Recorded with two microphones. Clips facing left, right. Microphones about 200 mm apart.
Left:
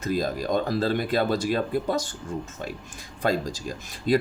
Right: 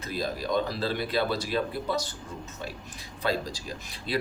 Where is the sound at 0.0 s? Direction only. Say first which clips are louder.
Left 5 dB; 45° left (ahead or behind).